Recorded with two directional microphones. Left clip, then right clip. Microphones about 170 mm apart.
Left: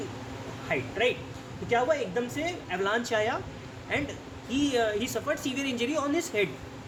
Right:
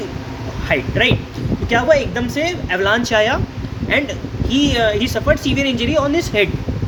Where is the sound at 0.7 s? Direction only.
25° right (ahead or behind).